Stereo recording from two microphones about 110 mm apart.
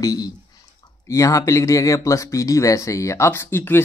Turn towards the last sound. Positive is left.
turn(degrees=20)  # may be behind; listen again after turning